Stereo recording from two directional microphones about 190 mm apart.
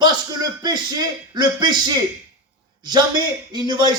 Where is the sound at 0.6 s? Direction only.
20° right (ahead or behind).